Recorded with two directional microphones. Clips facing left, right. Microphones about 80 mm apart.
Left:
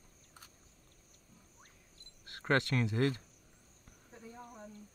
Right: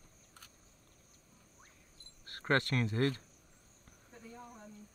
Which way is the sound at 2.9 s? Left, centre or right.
Centre.